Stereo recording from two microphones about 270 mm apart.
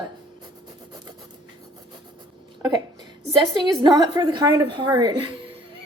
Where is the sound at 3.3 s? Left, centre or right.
Centre.